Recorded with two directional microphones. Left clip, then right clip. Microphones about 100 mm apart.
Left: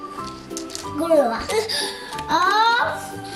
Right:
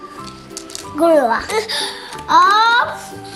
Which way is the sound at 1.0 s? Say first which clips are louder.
Right 5 dB; 20° right (ahead or behind).